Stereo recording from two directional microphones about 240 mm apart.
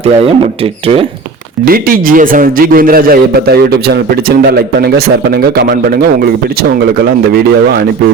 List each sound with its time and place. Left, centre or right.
0.0 s speech: right
1.6 s a man's voice: right